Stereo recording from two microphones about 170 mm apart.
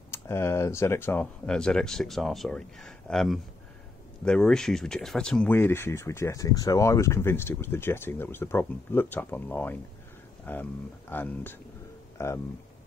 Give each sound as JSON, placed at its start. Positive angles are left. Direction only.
{"t": 0.1, "sound": "speech", "side_deg": 15}